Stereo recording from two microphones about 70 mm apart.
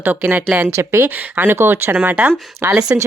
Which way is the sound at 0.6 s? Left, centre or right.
Right.